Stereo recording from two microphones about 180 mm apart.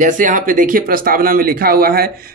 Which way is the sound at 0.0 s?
45° right (ahead or behind).